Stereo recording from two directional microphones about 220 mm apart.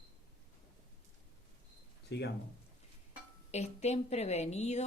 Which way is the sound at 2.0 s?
50° left (ahead or behind).